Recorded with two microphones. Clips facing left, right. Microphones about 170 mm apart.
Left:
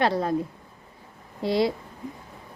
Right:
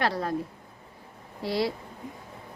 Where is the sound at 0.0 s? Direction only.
25° left (ahead or behind).